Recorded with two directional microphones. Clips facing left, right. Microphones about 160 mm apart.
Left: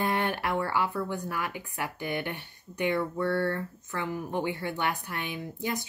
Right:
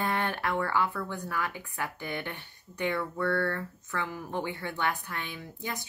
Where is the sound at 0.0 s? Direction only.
15° left (ahead or behind).